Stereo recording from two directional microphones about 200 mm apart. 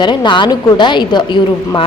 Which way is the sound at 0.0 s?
20° left (ahead or behind).